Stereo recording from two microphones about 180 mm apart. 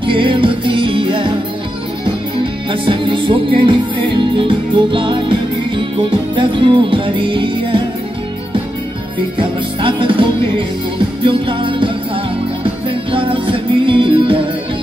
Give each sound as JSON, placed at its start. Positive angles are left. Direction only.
{"t": 0.0, "sound": "music", "side_deg": -30}
{"t": 2.7, "sound": "music", "side_deg": -30}
{"t": 9.4, "sound": "music", "side_deg": -30}